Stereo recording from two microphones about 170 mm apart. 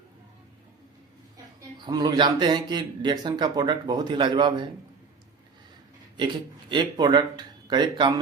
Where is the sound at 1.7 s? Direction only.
25° right (ahead or behind).